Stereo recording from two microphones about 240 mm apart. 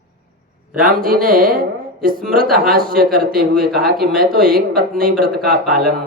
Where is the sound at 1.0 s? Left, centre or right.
Right.